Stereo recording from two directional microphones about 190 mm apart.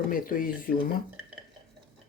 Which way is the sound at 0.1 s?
50° left (ahead or behind).